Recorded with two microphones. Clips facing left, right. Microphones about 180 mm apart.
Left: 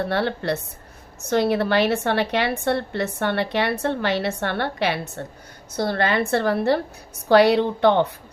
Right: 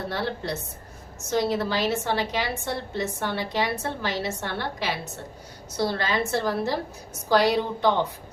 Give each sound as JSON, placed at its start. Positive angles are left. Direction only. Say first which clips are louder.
{"t": 0.1, "sound": "a woman's voice", "louder": "left 6 dB", "side_deg": 65}